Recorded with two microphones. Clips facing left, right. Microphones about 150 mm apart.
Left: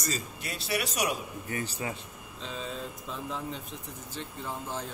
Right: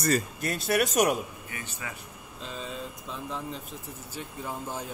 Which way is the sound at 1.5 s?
35° left (ahead or behind).